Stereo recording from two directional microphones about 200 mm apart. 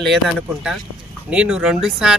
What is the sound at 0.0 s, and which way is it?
Speech, centre (ahead or behind).